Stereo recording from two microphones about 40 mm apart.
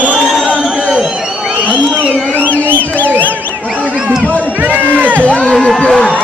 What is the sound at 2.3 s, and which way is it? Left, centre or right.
Music, left.